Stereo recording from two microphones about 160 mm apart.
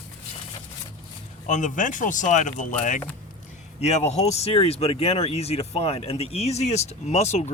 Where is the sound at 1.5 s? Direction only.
50° left (ahead or behind).